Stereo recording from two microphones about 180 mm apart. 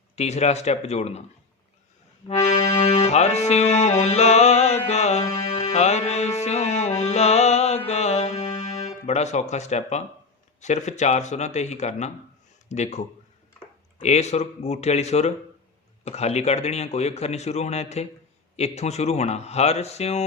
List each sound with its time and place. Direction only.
0.2 s accordion: 40° left (ahead or behind)
2.2 s accordion: 35° left (ahead or behind)
5.3 s music: 35° left (ahead or behind)
10.6 s accordion: 40° left (ahead or behind)
12.6 s speech: 40° left (ahead or behind)
14.0 s accordion: 40° left (ahead or behind)